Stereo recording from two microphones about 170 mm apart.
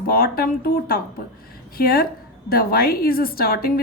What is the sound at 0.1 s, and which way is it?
A woman's voice, 60° left (ahead or behind).